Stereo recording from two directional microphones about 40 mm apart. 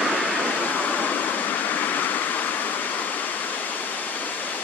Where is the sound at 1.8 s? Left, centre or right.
Left.